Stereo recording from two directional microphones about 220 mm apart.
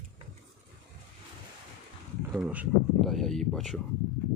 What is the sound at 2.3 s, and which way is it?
Speech, 5° right (ahead or behind).